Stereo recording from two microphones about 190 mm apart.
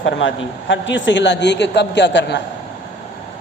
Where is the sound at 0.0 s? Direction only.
80° left.